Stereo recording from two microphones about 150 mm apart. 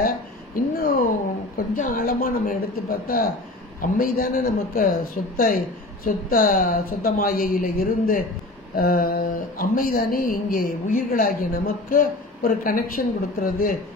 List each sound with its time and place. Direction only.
0.6 s speech: 70° left (ahead or behind)